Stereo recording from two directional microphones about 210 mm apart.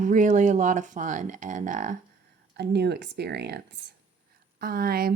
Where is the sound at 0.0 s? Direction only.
35° right (ahead or behind).